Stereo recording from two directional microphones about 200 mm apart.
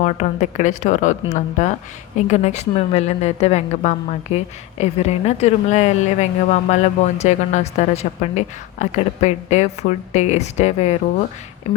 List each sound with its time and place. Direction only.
0.0 s a woman's voice: 35° left (ahead or behind)